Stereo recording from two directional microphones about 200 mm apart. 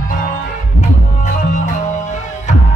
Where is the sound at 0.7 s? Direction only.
35° left (ahead or behind).